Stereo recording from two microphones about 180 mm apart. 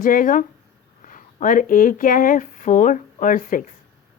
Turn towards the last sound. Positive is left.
turn(degrees=50)  # may be behind; listen again after turning